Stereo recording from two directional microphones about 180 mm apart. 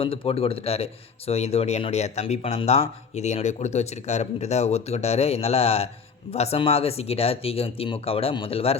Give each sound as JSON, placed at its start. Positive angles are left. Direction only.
{"t": 0.0, "sound": "speech", "side_deg": 30}